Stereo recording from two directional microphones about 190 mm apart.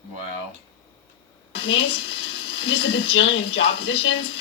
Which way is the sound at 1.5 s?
65° left (ahead or behind).